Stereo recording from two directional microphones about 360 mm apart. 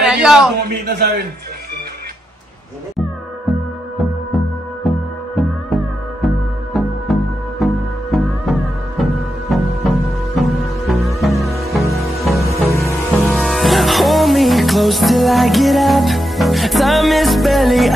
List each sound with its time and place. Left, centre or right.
0.0 s a sound: centre
0.7 s a man's voice: right
4.8 s music: centre